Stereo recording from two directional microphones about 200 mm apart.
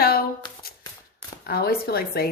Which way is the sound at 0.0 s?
50° left (ahead or behind).